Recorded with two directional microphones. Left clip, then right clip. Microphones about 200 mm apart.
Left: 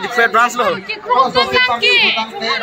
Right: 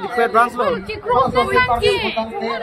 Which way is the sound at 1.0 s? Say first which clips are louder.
Left 3 dB; 55° right (ahead or behind).